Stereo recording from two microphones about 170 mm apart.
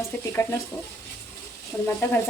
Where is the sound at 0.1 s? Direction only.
5° left (ahead or behind).